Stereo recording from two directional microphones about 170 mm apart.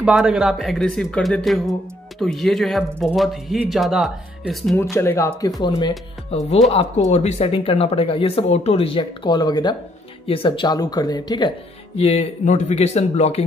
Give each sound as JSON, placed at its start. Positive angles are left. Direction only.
{"t": 0.0, "sound": "speech", "side_deg": -5}
{"t": 4.9, "sound": "speech", "side_deg": 15}
{"t": 5.6, "sound": "speech", "side_deg": 25}
{"t": 12.0, "sound": "speech", "side_deg": 40}